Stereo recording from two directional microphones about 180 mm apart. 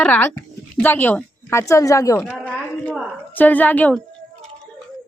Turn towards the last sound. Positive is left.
turn(degrees=10)  # may be behind; listen again after turning